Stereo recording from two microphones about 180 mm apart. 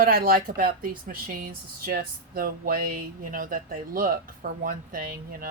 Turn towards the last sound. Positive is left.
turn(degrees=-55)  # may be behind; listen again after turning